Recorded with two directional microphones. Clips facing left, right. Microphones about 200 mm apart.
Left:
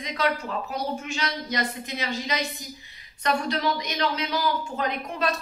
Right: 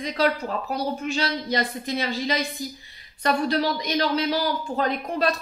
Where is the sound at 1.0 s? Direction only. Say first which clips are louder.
Right 5 dB; 35° right (ahead or behind).